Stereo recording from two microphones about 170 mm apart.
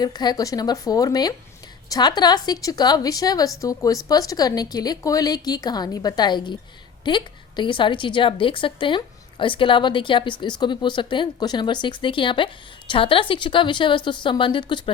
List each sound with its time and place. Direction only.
0.0 s a woman's voice: 25° left (ahead or behind)